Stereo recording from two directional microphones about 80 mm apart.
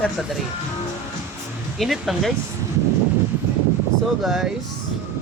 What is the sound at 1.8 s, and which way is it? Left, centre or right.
Speech, centre.